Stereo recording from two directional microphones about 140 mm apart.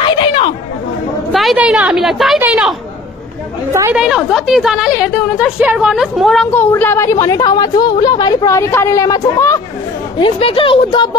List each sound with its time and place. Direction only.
0.2 s chatter: 40° left (ahead or behind)
1.3 s a woman's voice: centre (ahead or behind)
3.9 s a woman's voice: 5° right (ahead or behind)
6.5 s a woman's voice: 15° left (ahead or behind)
10.1 s a woman's voice: 40° left (ahead or behind)